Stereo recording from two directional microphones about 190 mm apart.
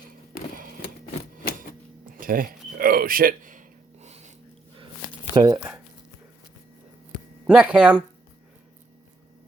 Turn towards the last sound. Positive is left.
turn(degrees=-5)  # may be behind; listen again after turning